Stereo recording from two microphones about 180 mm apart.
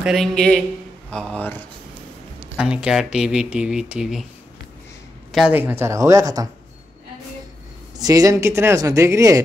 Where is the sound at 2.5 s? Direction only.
5° right (ahead or behind).